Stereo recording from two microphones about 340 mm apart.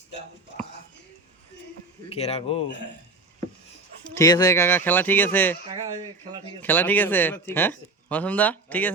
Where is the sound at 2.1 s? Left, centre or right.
Centre.